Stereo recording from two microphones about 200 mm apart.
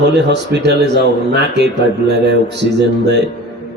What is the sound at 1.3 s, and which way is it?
Mantra, 55° right (ahead or behind).